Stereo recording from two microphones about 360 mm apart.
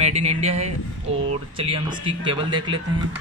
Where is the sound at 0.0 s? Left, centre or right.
Centre.